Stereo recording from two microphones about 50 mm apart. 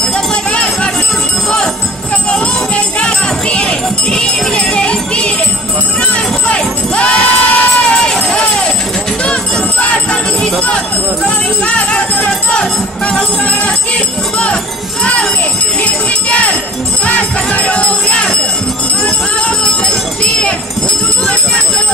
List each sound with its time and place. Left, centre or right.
0.3 s jingle bell: left
2.7 s jingle bell: left
6.1 s crowd: left
9.2 s jingle bell: left
11.2 s music: left
15.8 s jingle bell: left
17.0 s music: left